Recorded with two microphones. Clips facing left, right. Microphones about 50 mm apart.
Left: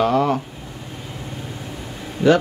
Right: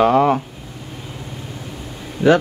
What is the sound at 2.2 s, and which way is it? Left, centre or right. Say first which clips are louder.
Speech: right 1 dB; centre.